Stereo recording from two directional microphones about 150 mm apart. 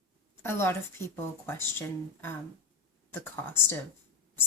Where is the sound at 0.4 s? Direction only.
15° left (ahead or behind).